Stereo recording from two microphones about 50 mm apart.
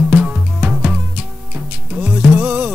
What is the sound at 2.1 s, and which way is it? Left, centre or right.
Music, right.